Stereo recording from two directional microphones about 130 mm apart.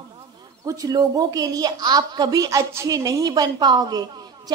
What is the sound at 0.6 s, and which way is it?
A woman's voice, 25° right (ahead or behind).